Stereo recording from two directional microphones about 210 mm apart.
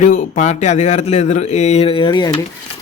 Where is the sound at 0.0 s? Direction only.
35° left (ahead or behind).